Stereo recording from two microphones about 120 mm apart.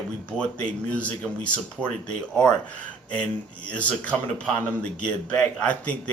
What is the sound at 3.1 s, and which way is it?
A man's voice, 10° left (ahead or behind).